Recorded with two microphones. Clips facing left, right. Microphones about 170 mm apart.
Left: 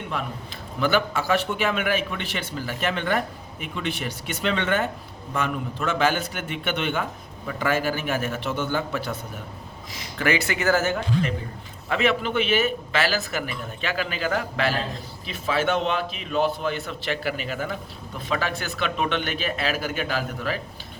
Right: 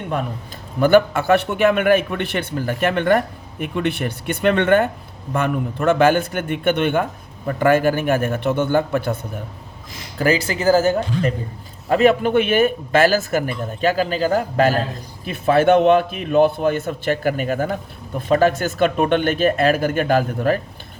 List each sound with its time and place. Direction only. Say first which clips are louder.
0.8 s a man's voice: right 9 dB; 50° right (ahead or behind)
10.2 s a man's voice: right 5 dB; 35° right (ahead or behind); by 20.6 s 50° right (ahead or behind)